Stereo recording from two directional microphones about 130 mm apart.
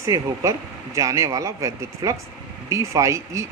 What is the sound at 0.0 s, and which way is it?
Speech, 25° right (ahead or behind).